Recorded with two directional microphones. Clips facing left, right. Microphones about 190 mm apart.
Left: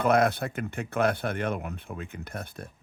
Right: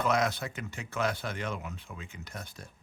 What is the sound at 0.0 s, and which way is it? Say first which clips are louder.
Speech: left 6 dB; 55° left (ahead or behind).